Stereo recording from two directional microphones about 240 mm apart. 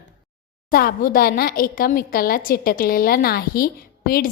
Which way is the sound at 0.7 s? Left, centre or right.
Left.